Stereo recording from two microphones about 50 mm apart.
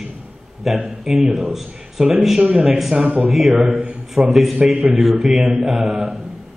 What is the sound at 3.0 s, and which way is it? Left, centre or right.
Speech, right.